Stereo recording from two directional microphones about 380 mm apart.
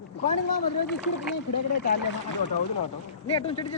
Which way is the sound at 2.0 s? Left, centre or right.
Left.